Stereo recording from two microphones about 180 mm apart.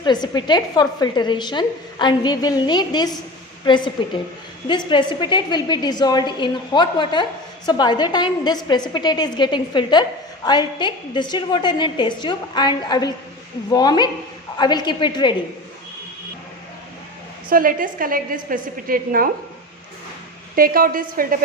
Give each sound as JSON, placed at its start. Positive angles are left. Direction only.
{"t": 0.0, "sound": "a woman's voice", "side_deg": 25}
{"t": 17.5, "sound": "a woman's voice", "side_deg": -50}
{"t": 20.6, "sound": "a woman's voice", "side_deg": -50}